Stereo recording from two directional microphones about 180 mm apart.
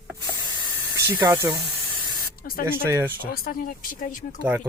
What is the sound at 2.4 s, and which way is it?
Speech, 50° left (ahead or behind).